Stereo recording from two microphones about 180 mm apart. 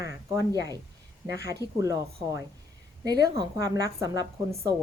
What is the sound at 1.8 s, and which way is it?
A woman's voice, 15° right (ahead or behind).